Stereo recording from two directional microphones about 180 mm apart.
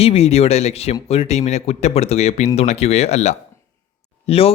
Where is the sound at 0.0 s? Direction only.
35° left (ahead or behind).